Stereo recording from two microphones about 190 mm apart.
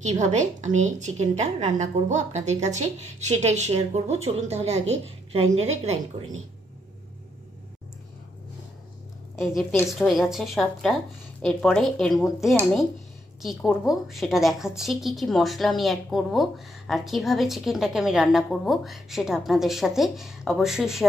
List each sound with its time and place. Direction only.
0.0 s a woman's voice: 40° right (ahead or behind)
9.4 s a woman's voice: centre (ahead or behind)
13.4 s a woman's voice: centre (ahead or behind)